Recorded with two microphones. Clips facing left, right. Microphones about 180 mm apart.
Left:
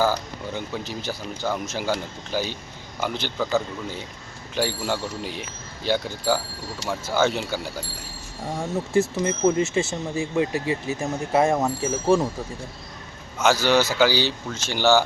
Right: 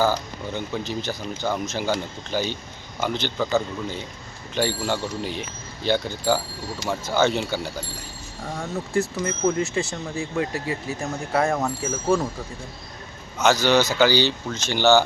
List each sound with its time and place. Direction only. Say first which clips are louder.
0.0 s speech: right 1 dB; 5° left (ahead or behind)
4.5 s speech: right 1 dB; 5° left (ahead or behind)
8.9 s speech: left 3 dB; 25° left (ahead or behind)
13.4 s speech: right 1 dB; 10° left (ahead or behind)